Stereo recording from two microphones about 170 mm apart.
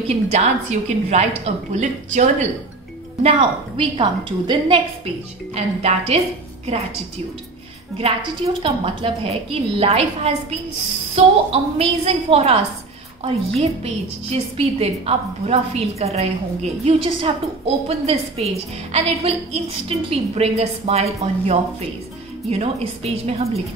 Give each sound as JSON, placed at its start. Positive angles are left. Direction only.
{"t": 0.1, "sound": "a woman's voice", "side_deg": -40}
{"t": 3.2, "sound": "a woman's voice", "side_deg": -30}
{"t": 8.6, "sound": "a woman's voice", "side_deg": -35}
{"t": 14.3, "sound": "a woman's voice", "side_deg": -35}